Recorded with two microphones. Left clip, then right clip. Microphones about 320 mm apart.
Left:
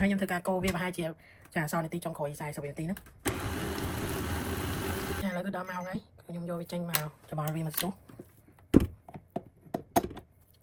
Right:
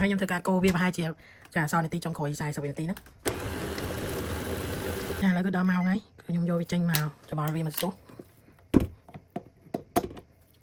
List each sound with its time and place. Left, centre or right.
0.0 s speech: right
3.2 s vehicle: centre
5.2 s speech: right
8.7 s a sound: centre